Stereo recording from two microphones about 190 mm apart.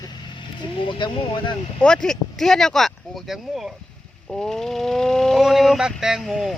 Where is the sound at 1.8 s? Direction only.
5° left (ahead or behind).